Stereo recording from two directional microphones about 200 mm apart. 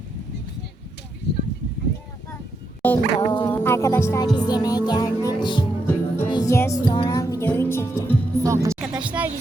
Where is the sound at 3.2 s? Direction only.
25° left (ahead or behind).